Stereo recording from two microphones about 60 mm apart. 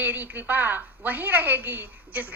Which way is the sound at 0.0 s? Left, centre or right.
Right.